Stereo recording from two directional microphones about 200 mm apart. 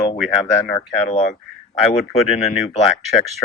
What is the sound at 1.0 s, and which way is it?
Speech, 40° left (ahead or behind).